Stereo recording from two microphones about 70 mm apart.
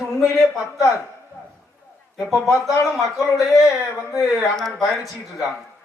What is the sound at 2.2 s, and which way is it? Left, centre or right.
A man's voice, centre.